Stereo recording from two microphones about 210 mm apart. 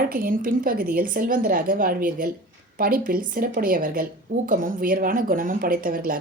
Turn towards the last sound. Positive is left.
turn(degrees=-40)  # may be behind; listen again after turning